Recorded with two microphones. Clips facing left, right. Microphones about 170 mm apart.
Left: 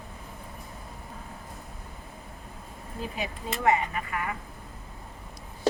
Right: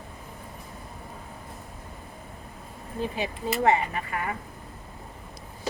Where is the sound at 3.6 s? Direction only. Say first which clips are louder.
Right 1 dB; 30° right (ahead or behind).